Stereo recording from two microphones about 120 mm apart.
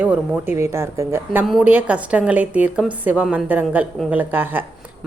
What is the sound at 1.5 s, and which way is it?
A woman's voice, 10° right (ahead or behind).